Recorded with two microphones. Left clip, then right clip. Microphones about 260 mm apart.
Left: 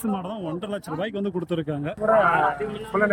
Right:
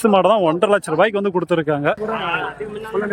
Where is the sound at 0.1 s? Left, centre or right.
Right.